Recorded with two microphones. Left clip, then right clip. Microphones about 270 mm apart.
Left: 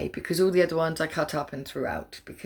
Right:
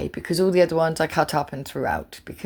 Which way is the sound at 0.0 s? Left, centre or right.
Centre.